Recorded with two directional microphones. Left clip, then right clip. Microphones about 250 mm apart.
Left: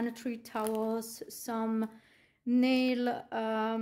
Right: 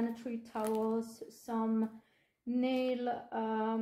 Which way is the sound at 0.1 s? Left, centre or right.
Left.